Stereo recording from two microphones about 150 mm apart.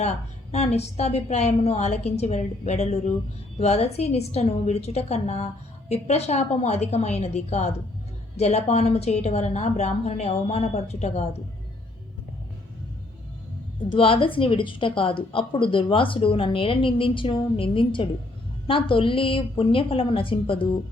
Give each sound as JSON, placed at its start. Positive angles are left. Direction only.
{"t": 0.5, "sound": "a woman's voice", "side_deg": 45}
{"t": 13.9, "sound": "a woman's voice", "side_deg": 35}